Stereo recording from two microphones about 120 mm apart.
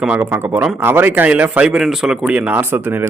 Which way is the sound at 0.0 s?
10° right (ahead or behind).